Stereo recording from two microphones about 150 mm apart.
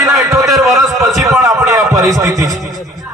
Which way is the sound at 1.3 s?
20° right (ahead or behind).